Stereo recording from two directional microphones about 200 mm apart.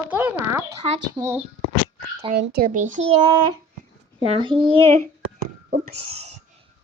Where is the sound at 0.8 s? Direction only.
20° right (ahead or behind).